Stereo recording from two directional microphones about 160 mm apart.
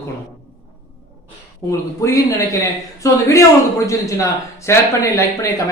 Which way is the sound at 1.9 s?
20° left (ahead or behind).